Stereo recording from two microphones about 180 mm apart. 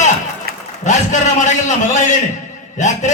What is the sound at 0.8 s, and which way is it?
A man's voice, 40° left (ahead or behind).